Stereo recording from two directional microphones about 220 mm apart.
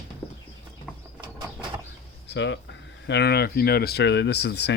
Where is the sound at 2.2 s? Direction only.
55° left (ahead or behind).